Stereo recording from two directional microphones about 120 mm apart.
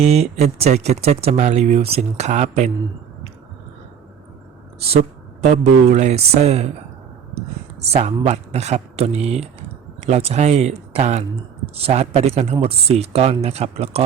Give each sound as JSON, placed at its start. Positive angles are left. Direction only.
{"t": 0.0, "sound": "speech", "side_deg": -65}
{"t": 5.9, "sound": "speech", "side_deg": -70}
{"t": 7.8, "sound": "speech", "side_deg": -60}